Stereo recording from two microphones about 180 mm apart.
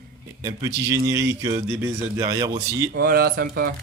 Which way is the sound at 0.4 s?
15° right (ahead or behind).